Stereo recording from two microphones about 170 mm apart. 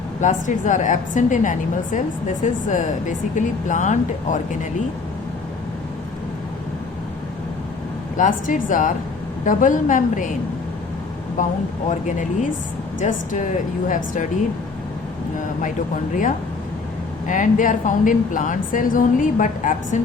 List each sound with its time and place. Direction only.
0.2 s a woman's voice: 45° left (ahead or behind)
8.1 s a woman's voice: 50° left (ahead or behind)
11.9 s a woman's voice: 50° left (ahead or behind)
17.2 s a woman's voice: 50° left (ahead or behind)